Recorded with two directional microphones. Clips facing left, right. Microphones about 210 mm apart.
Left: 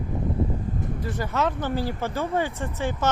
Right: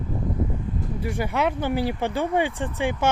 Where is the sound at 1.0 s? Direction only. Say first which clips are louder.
Right 2 dB; 10° right (ahead or behind).